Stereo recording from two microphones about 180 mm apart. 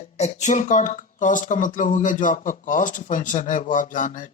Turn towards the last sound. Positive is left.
turn(degrees=45)  # may be behind; listen again after turning